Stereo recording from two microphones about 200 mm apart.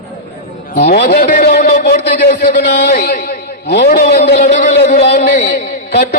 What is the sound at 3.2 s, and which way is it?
A man's voice, 55° left (ahead or behind).